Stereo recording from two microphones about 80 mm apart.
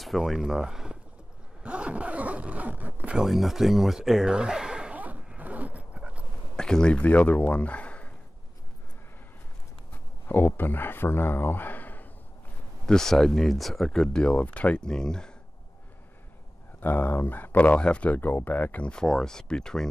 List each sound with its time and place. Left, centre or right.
0.0 s speech: centre; by 3.2 s right
3.2 s speech: centre
4.9 s zipper: centre
5.9 s dog: centre
6.5 s speech: centre
10.2 s speech: left
12.8 s speech: centre
16.8 s speech: left; by 19.9 s centre